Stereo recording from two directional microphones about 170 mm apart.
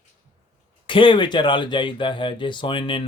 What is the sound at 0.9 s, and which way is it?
Speech, 30° left (ahead or behind).